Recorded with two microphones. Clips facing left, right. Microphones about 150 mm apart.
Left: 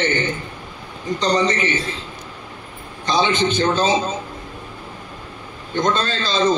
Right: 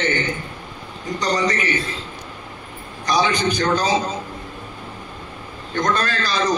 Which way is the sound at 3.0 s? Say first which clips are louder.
Left 1 dB; 25° left (ahead or behind).